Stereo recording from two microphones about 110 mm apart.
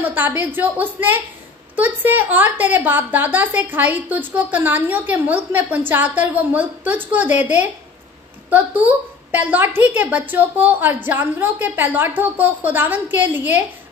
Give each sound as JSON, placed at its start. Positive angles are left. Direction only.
{"t": 0.0, "sound": "a woman's voice", "side_deg": -15}
{"t": 8.5, "sound": "a woman's voice", "side_deg": -15}